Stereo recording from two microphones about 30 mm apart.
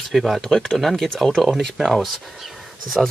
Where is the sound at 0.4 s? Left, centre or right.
Centre.